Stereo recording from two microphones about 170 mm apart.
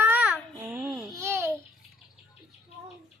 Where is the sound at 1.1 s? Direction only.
15° right (ahead or behind).